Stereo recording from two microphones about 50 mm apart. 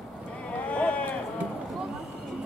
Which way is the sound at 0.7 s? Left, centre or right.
Left.